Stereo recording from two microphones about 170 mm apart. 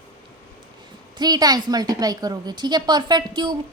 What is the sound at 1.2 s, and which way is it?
A woman's voice, 25° right (ahead or behind).